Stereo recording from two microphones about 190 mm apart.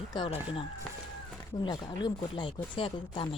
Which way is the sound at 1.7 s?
25° left (ahead or behind).